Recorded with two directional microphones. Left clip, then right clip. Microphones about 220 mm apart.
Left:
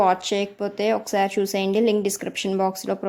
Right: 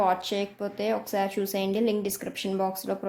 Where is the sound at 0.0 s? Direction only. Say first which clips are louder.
Left 5 dB; 30° left (ahead or behind).